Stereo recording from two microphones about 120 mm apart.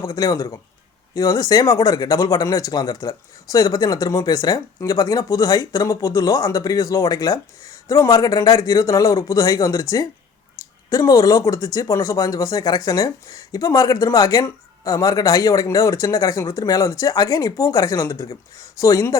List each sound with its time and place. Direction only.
0.0 s speech: 30° left (ahead or behind)